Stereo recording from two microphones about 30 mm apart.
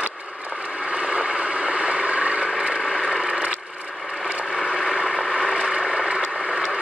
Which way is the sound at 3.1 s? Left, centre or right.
Right.